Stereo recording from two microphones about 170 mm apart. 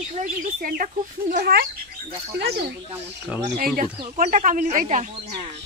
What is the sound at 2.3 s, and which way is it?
Speech, 75° right (ahead or behind).